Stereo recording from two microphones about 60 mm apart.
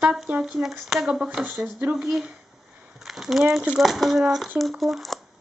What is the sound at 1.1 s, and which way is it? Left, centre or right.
Speech, centre.